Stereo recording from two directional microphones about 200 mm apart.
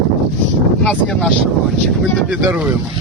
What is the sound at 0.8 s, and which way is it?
Speech, 5° left (ahead or behind).